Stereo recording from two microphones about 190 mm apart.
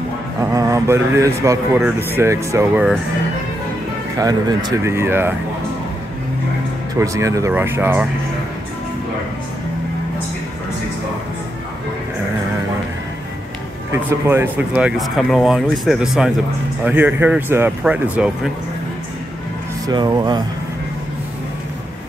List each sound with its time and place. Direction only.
0.4 s speech: 15° right (ahead or behind)
4.2 s speech: 20° right (ahead or behind)
7.0 s speech: 15° right (ahead or behind)
14.2 s speech: 10° right (ahead or behind)
19.9 s speech: 25° right (ahead or behind)